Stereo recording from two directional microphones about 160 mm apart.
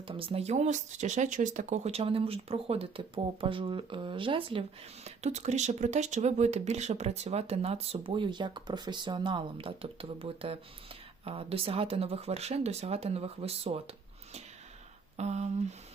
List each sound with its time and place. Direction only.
0.1 s speech: 35° right (ahead or behind)
5.0 s speech: 45° right (ahead or behind)
15.1 s a sound: 45° right (ahead or behind)